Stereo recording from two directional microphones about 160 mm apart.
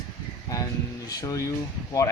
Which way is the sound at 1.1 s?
20° left (ahead or behind).